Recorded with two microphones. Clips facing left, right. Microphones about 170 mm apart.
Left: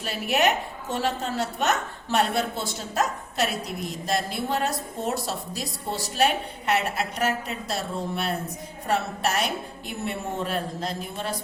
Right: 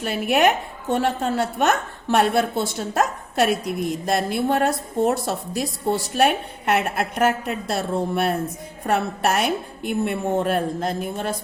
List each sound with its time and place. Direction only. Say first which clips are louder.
0.0 s a woman's voice: right 5 dB; 55° right (ahead or behind)